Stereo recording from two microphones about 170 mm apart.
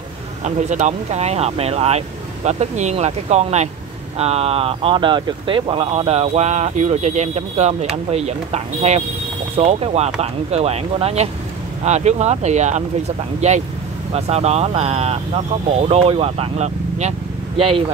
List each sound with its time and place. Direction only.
0.4 s speech: 45° right (ahead or behind)